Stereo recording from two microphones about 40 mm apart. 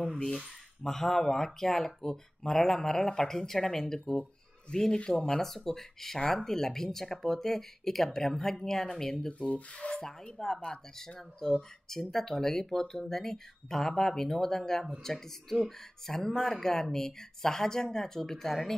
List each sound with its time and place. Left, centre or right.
0.8 s speech: centre
4.1 s a sound: left
5.1 s speech: centre